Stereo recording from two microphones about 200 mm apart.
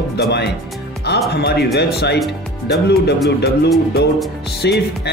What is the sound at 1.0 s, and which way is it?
Speech, 55° left (ahead or behind).